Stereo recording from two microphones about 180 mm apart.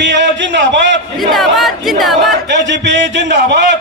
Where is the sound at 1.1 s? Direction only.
Centre (ahead or behind).